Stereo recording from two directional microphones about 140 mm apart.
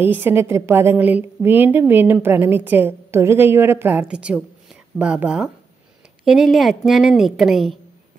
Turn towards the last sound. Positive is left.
turn(degrees=0)  # may be behind; listen again after turning